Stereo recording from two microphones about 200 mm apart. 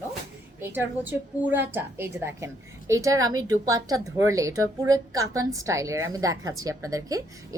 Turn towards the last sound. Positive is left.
turn(degrees=-15)  # may be behind; listen again after turning